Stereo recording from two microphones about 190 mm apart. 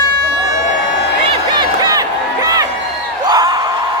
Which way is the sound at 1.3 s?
25° right (ahead or behind).